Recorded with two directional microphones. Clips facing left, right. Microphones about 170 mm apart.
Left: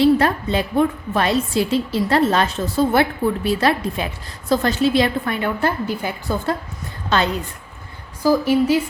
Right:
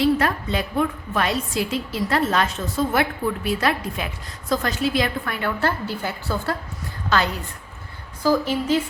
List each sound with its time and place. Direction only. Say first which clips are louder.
0.0 s a woman's voice: left 5 dB; 30° left (ahead or behind)
8.2 s a woman's voice: left 5 dB; 10° left (ahead or behind)